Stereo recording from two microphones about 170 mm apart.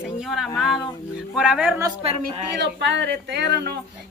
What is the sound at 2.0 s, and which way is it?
Speech, 35° right (ahead or behind).